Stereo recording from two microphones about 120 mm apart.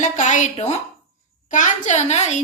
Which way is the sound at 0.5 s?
70° left (ahead or behind).